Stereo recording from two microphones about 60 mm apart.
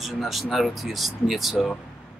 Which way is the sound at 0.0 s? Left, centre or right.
Centre.